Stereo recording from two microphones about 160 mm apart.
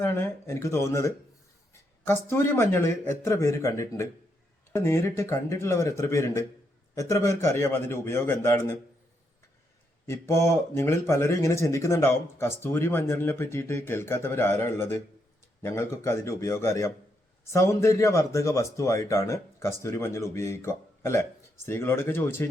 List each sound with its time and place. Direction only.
0.0 s speech: 15° left (ahead or behind)
10.1 s speech: 15° left (ahead or behind)